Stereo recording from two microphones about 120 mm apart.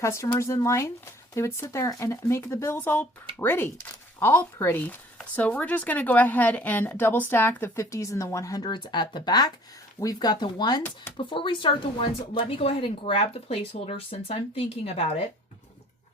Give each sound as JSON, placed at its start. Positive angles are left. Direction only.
{"t": 0.0, "sound": "speech", "side_deg": 25}